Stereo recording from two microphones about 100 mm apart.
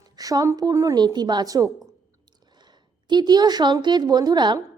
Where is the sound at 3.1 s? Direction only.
45° right (ahead or behind).